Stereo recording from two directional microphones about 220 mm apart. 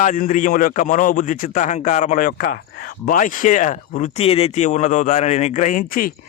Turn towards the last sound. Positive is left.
turn(degrees=40)  # may be behind; listen again after turning